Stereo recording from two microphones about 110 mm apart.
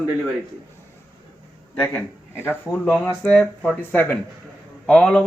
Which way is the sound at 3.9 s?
15° left (ahead or behind).